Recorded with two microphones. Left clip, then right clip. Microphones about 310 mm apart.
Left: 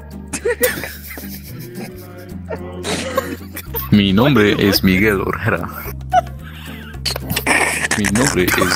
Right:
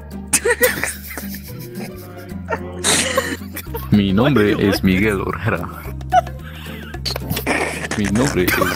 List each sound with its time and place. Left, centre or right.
0.3 s music: right
0.6 s a sound: centre
2.8 s throat clearing: right
3.7 s speech: centre
7.2 s a sound: centre
8.5 s speech: centre